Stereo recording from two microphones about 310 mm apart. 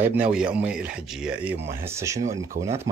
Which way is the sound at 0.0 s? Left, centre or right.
Centre.